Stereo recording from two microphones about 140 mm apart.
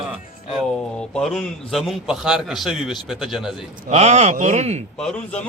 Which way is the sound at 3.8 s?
55° right (ahead or behind).